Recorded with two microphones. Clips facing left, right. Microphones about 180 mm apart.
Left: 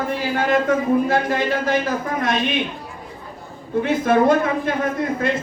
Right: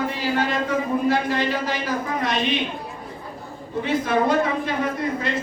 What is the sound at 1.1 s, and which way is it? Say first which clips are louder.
Speech: left 2 dB; 50° left (ahead or behind).